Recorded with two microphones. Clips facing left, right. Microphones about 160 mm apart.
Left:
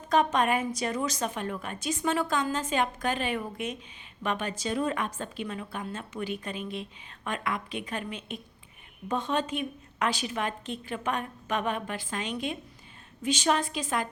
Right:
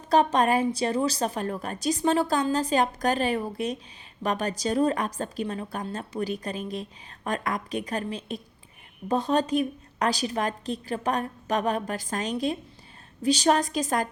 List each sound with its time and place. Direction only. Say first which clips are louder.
0.1 s a woman's voice: right 3 dB; 35° right (ahead or behind)